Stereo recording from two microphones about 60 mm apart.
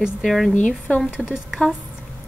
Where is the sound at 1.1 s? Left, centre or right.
Centre.